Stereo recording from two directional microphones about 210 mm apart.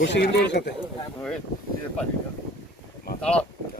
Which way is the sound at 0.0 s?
55° left (ahead or behind).